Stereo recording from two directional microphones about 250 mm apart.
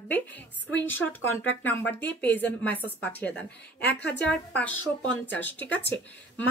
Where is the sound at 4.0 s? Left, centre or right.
Left.